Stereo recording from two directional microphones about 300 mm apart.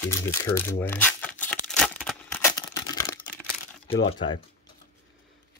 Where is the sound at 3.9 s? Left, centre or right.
Centre.